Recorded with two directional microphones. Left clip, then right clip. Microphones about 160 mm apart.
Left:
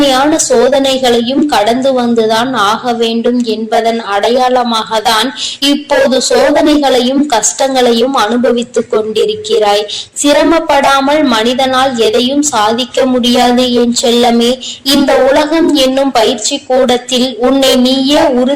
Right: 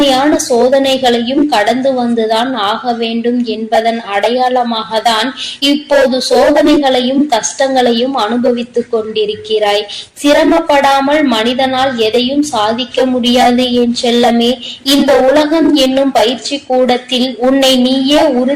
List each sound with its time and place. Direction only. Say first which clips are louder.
0.0 s a woman's voice: left 1 dB; 15° left (ahead or behind)